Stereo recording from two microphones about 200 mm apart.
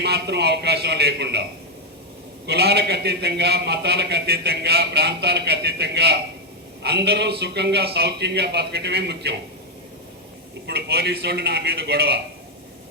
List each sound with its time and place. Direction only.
0.0 s a man's voice: 55° right (ahead or behind)
2.5 s a man's voice: 55° right (ahead or behind)
10.7 s a man's voice: 55° right (ahead or behind)